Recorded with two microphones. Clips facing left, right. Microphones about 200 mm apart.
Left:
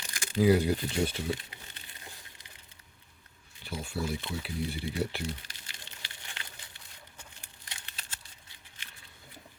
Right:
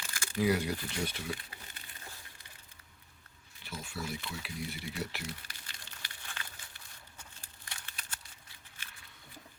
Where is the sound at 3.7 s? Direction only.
30° left (ahead or behind).